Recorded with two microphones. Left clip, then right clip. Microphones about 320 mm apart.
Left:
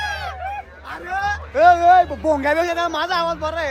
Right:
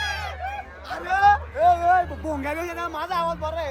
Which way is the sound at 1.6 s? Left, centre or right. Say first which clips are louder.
Left 9 dB; left.